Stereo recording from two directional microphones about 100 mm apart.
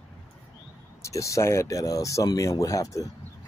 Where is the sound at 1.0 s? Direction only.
30° left (ahead or behind).